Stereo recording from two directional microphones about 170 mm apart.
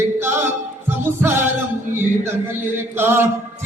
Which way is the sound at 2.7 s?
10° right (ahead or behind).